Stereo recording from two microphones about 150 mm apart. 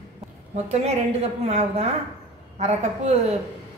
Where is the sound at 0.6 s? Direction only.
45° right (ahead or behind).